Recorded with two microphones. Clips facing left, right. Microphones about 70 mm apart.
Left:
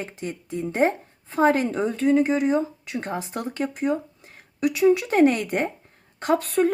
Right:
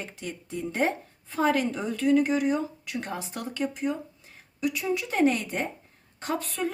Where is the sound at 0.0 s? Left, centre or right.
Left.